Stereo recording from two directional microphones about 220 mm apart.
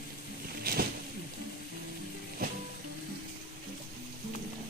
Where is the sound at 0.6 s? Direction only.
45° right (ahead or behind).